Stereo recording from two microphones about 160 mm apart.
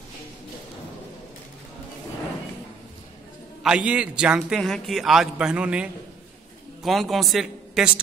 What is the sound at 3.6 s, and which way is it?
A man's voice, 5° right (ahead or behind).